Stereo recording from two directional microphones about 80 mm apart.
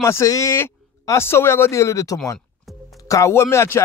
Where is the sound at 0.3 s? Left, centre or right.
Left.